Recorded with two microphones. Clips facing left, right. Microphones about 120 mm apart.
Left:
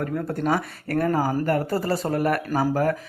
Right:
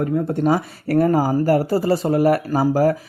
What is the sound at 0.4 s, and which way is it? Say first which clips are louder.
Speech: right 5 dB; 40° right (ahead or behind).